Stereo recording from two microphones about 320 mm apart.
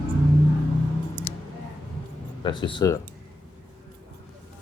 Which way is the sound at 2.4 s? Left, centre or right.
Centre.